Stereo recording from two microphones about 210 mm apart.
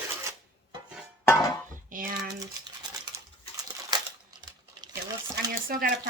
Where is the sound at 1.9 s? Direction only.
40° right (ahead or behind).